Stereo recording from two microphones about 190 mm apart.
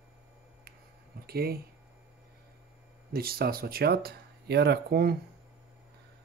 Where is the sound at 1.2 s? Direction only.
55° right (ahead or behind).